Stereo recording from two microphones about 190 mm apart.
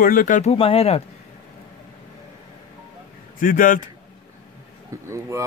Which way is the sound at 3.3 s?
45° left (ahead or behind).